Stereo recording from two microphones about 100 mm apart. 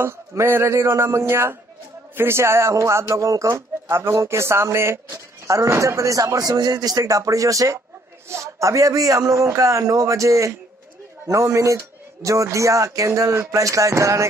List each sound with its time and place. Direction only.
0.0 s a man's voice: 25° right (ahead or behind)